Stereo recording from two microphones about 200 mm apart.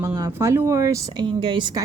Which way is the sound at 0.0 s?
10° right (ahead or behind).